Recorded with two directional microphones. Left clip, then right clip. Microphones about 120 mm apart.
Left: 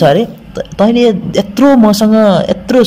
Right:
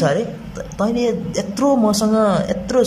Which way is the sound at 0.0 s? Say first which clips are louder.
Left 9 dB; 35° left (ahead or behind).